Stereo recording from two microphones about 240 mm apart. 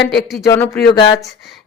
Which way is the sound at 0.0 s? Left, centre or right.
Left.